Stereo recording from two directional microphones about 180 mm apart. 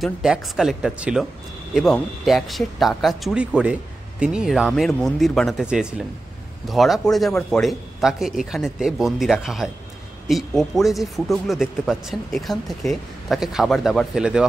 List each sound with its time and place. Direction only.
0.0 s speech: centre (ahead or behind)